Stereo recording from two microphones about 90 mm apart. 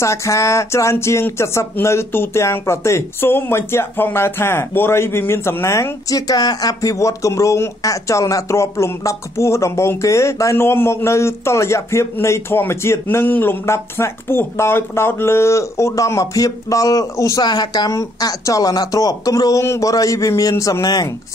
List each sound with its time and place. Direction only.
0.0 s speech: 35° left (ahead or behind)
17.5 s speech: 50° left (ahead or behind)